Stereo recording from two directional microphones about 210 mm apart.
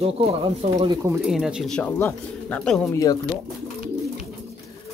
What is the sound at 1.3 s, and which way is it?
Speech, 5° right (ahead or behind).